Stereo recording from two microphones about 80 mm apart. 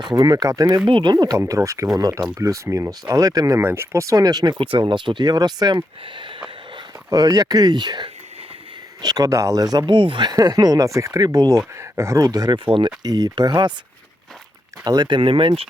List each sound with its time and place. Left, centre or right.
0.1 s speech: right
0.9 s speech: right
1.4 s speech: right
3.6 s speech: right
7.1 s speech: right
9.0 s speech: right
9.9 s speech: right
10.3 s speech: right
11.8 s speech: right
14.8 s speech: right